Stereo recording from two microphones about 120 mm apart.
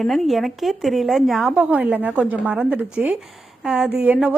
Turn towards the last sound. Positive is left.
turn(degrees=-10)  # may be behind; listen again after turning